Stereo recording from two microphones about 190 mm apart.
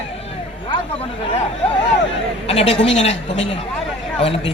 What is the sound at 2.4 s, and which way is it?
Speech, 30° left (ahead or behind).